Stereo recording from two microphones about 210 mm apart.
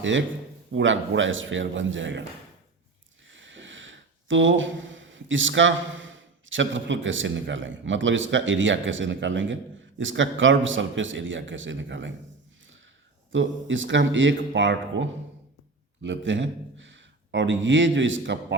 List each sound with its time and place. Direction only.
0.0 s a man's voice: 65° right (ahead or behind)
3.2 s a man's voice: 65° right (ahead or behind)
13.3 s a man's voice: 65° right (ahead or behind)